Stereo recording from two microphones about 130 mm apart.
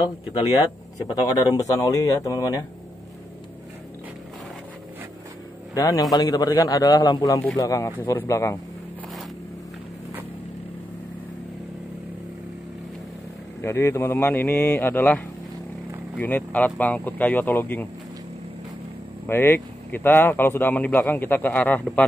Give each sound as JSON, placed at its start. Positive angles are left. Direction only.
{"t": 0.3, "sound": "speech", "side_deg": 30}
{"t": 5.8, "sound": "speech", "side_deg": 30}
{"t": 13.6, "sound": "speech", "side_deg": 20}
{"t": 19.2, "sound": "speech", "side_deg": 15}